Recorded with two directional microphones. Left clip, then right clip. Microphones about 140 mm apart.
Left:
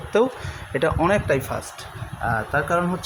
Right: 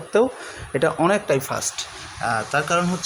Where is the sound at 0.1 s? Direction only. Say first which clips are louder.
Right 1 dB; 5° right (ahead or behind).